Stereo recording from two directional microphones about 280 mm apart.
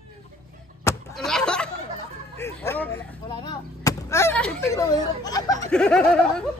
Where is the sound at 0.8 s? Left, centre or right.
Centre.